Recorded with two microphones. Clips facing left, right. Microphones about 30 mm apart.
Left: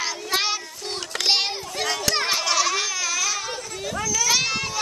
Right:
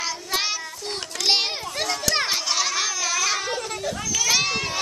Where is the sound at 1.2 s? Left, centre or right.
Centre.